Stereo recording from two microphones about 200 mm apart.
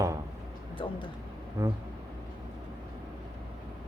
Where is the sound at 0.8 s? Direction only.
25° left (ahead or behind).